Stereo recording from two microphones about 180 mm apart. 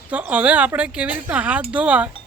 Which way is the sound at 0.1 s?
10° right (ahead or behind).